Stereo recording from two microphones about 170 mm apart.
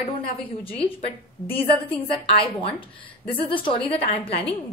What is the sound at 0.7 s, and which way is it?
A woman's voice, 35° left (ahead or behind).